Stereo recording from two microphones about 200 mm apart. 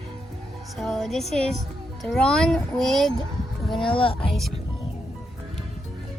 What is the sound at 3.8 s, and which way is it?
Speech, 25° left (ahead or behind).